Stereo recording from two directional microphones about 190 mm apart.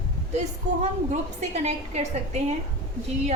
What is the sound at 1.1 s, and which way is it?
A woman's voice, 35° right (ahead or behind).